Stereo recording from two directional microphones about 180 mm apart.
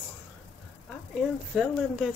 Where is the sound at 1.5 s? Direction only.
5° right (ahead or behind).